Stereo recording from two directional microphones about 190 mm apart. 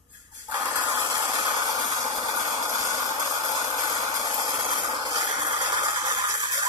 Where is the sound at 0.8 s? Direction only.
20° right (ahead or behind).